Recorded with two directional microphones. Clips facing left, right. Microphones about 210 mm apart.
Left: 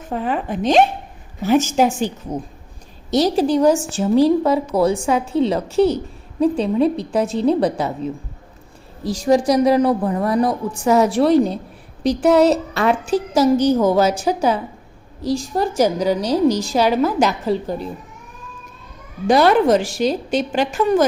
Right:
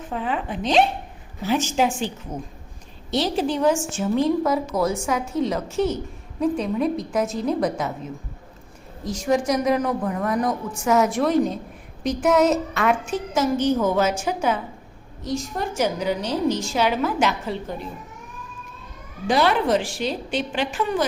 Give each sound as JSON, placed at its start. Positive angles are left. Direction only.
{"t": 0.1, "sound": "a woman's voice", "side_deg": 45}
{"t": 3.1, "sound": "a woman's voice", "side_deg": 40}
{"t": 9.0, "sound": "a woman's voice", "side_deg": 35}
{"t": 19.3, "sound": "a woman's voice", "side_deg": 45}